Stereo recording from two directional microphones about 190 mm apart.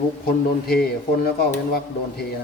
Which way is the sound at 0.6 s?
55° left (ahead or behind).